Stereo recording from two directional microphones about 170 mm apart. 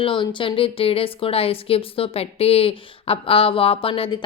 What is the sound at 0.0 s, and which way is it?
Speech, 30° left (ahead or behind).